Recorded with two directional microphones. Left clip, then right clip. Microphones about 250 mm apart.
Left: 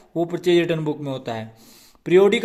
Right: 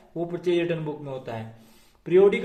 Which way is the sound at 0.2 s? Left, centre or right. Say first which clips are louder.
Left 6 dB; left.